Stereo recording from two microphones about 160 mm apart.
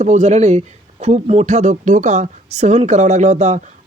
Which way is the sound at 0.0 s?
45° right (ahead or behind).